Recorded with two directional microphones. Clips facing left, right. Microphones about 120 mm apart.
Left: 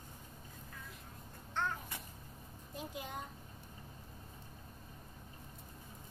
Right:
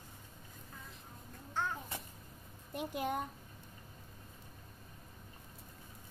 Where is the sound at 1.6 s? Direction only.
10° right (ahead or behind).